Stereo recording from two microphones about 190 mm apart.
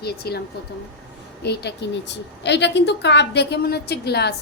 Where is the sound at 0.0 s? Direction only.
55° left (ahead or behind).